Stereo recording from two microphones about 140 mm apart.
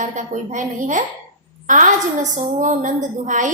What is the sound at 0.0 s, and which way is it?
A woman's voice, 65° right (ahead or behind).